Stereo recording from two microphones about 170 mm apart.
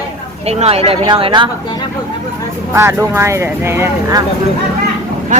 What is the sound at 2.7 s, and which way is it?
Speech, 15° right (ahead or behind).